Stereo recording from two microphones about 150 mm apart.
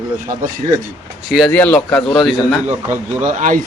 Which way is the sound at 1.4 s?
10° left (ahead or behind).